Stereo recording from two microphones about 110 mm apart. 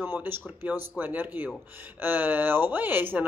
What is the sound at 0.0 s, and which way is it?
Speech, 20° right (ahead or behind).